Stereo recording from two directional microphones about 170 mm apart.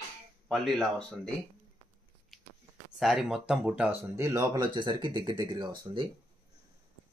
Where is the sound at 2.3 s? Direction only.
Centre (ahead or behind).